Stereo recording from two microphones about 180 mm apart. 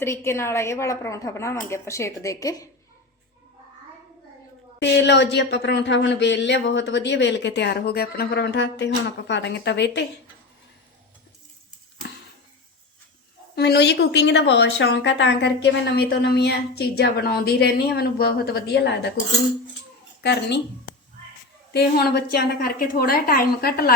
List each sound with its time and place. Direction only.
0.0 s a woman's voice: 15° left (ahead or behind)
4.8 s speech: 70° left (ahead or behind)
13.6 s speech: 65° left (ahead or behind)
21.7 s a woman's voice: 60° left (ahead or behind)